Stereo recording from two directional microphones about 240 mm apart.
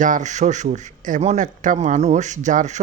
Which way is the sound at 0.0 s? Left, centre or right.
Right.